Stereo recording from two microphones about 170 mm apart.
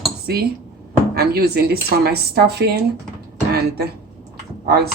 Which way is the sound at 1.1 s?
65° right (ahead or behind).